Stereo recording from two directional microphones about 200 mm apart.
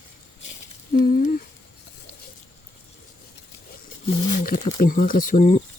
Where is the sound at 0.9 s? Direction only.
40° left (ahead or behind).